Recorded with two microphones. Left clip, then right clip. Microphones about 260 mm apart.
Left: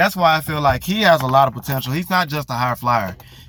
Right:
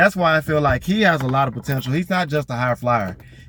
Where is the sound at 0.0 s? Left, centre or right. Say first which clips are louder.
Left 1 dB; centre.